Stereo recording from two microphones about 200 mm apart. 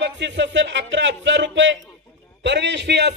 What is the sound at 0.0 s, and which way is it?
A man's voice, 65° right (ahead or behind).